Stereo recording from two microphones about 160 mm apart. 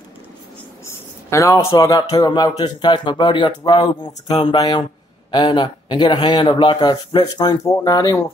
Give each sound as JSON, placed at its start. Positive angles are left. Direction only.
{"t": 1.3, "sound": "speech", "side_deg": 20}